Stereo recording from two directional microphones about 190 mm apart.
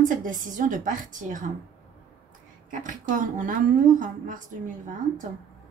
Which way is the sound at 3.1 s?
45° right (ahead or behind).